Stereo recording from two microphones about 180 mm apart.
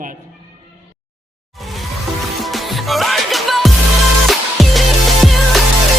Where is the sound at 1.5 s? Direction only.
Centre (ahead or behind).